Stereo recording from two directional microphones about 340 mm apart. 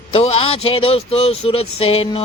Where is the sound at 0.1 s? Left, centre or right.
Centre.